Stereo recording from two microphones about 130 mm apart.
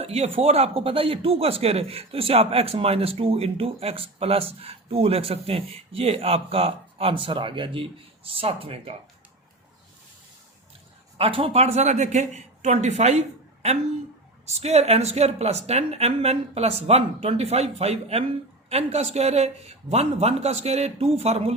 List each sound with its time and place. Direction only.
0.0 s speech: 50° right (ahead or behind)
11.2 s a man's voice: 45° right (ahead or behind)